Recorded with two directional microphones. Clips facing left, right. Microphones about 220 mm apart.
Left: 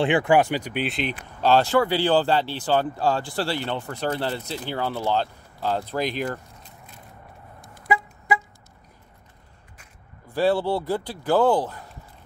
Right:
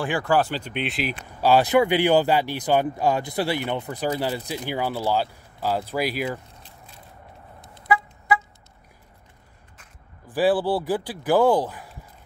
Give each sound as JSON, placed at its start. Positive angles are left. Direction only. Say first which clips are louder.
{"t": 0.0, "sound": "speech", "louder": "left 3 dB", "side_deg": 20}
{"t": 1.4, "sound": "speech", "louder": "right 1 dB", "side_deg": -15}
{"t": 7.6, "sound": "vehicle", "louder": "left 1 dB", "side_deg": -25}
{"t": 10.2, "sound": "speech", "louder": "right 1 dB", "side_deg": -10}